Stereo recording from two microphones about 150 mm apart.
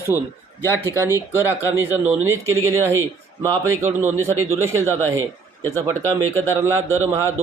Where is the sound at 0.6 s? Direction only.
15° left (ahead or behind).